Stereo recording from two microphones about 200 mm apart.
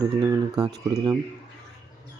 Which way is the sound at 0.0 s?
20° right (ahead or behind).